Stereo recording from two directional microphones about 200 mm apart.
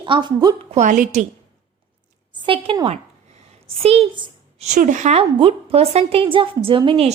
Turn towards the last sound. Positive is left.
turn(degrees=-25)  # may be behind; listen again after turning